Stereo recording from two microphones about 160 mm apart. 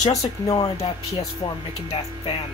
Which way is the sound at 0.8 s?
35° left (ahead or behind).